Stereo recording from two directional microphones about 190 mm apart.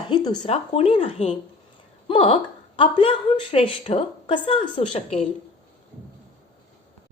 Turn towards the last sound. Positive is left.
turn(degrees=30)  # may be behind; listen again after turning